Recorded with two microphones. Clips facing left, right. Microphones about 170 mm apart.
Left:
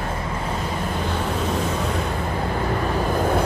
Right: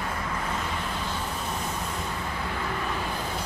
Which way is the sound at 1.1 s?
90° left.